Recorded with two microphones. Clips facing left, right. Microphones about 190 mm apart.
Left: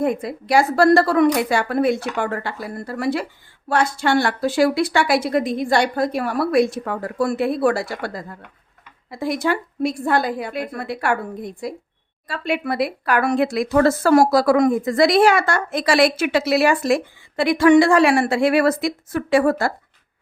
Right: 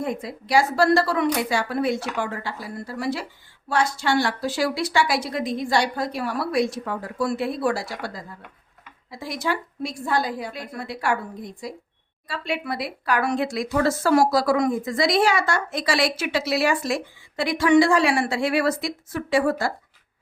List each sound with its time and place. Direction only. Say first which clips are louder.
0.0 s speech: left 7 dB; 55° left (ahead or behind)